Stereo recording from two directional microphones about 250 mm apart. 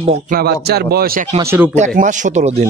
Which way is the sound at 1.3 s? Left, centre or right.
Centre.